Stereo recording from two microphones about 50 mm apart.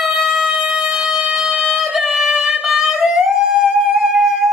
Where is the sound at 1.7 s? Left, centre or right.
Centre.